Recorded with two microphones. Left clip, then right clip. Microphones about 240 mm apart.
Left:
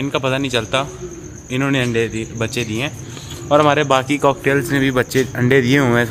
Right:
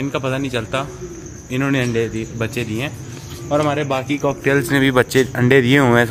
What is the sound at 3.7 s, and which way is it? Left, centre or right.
Speech, left.